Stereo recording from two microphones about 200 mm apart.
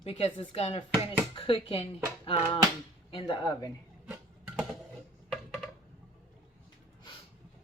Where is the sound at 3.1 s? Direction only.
25° left (ahead or behind).